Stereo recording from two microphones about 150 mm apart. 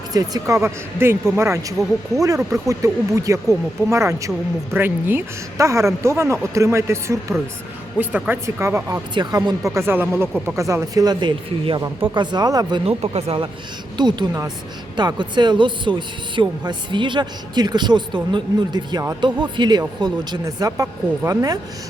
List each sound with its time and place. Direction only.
0.1 s a woman's voice: 25° right (ahead or behind)
11.8 s a woman's voice: 15° right (ahead or behind)
12.1 s speech: 30° right (ahead or behind)
13.0 s speech: 45° right (ahead or behind)
13.9 s speech: 30° right (ahead or behind)